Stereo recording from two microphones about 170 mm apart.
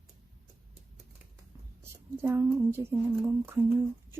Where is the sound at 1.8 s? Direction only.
10° right (ahead or behind).